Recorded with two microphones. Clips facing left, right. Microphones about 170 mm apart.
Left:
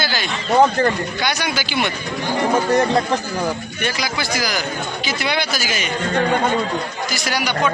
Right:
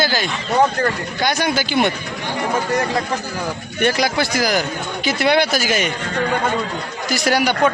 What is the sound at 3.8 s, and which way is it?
Speech, 55° right (ahead or behind).